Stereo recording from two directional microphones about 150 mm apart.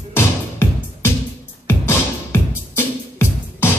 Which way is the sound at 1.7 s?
15° left (ahead or behind).